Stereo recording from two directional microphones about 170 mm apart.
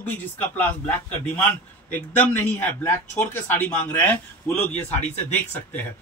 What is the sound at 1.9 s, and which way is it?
A man's voice, 10° left (ahead or behind).